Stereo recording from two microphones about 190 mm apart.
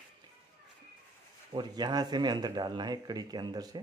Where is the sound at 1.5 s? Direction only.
25° right (ahead or behind).